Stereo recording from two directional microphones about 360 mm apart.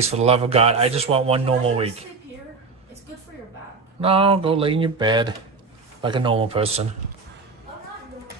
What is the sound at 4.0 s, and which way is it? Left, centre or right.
Speech, centre.